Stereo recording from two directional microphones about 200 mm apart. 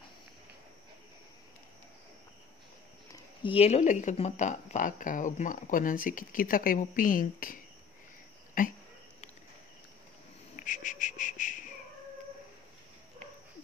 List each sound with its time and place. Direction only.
3.1 s speech: 25° left (ahead or behind); by 7.5 s 45° left (ahead or behind)
8.6 s speech: 45° left (ahead or behind)
10.5 s a sound: 40° left (ahead or behind)